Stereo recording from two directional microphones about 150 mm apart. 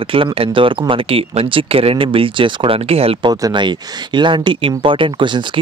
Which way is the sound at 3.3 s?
25° right (ahead or behind).